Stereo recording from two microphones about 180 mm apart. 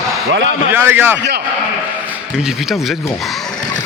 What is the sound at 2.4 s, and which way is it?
Speech, centre (ahead or behind).